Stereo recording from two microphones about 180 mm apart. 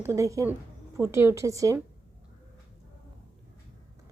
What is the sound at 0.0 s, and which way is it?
A woman's voice, 15° right (ahead or behind).